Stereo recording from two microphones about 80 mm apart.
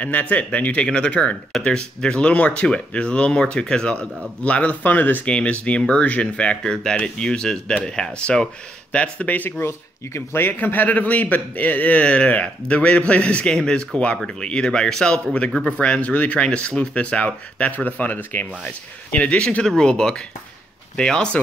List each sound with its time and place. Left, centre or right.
0.0 s a man's voice: centre
9.7 s a man's voice: left; by 21.4 s centre